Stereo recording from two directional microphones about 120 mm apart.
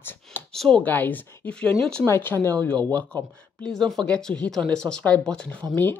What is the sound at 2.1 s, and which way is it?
Speech, 20° left (ahead or behind).